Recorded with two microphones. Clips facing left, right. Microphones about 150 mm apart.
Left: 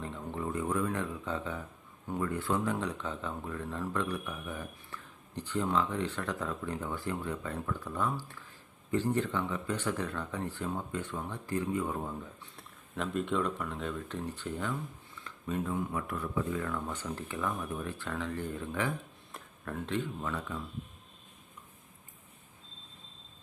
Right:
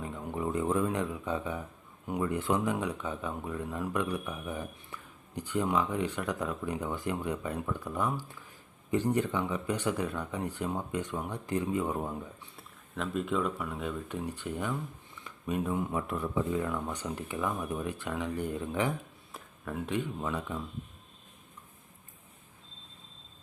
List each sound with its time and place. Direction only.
0.0 s a sound: 10° right (ahead or behind)
2.0 s speech: 15° right (ahead or behind)
12.5 s speech: centre (ahead or behind); by 18.9 s 15° right (ahead or behind)
19.3 s speech: 5° right (ahead or behind)